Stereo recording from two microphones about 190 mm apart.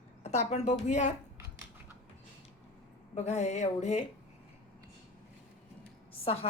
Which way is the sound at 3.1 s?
35° left (ahead or behind).